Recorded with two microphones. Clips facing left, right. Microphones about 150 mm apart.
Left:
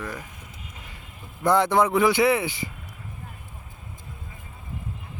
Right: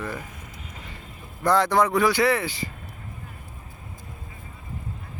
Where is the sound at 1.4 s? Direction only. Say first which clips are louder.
Even; 20° left (ahead or behind).